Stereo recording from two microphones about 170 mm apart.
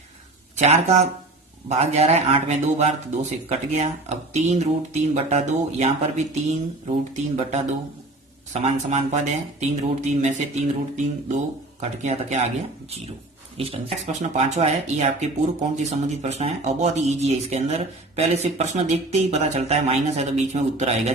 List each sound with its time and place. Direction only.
0.6 s speech: 40° right (ahead or behind)
8.6 s speech: 40° right (ahead or behind)
13.6 s speech: 35° right (ahead or behind)